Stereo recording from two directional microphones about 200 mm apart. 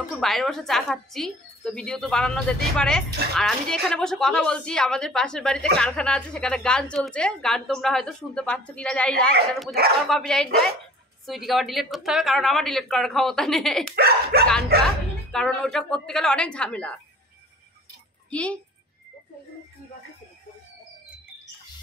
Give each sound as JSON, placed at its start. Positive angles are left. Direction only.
{"t": 0.1, "sound": "a woman's voice", "side_deg": 0}
{"t": 13.9, "sound": "speech", "side_deg": -50}
{"t": 15.3, "sound": "a woman's voice", "side_deg": 5}
{"t": 18.3, "sound": "a woman's voice", "side_deg": 5}